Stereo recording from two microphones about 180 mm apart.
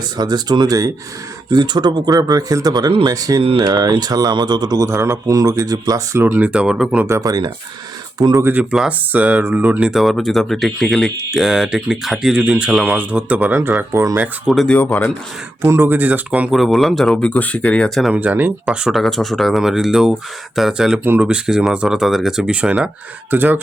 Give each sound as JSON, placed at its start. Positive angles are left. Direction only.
{"t": 0.2, "sound": "speech", "side_deg": -20}
{"t": 14.4, "sound": "speech", "side_deg": 0}
{"t": 15.6, "sound": "speech", "side_deg": -15}